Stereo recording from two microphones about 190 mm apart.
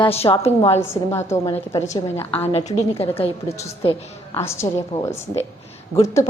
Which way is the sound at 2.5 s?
35° left (ahead or behind).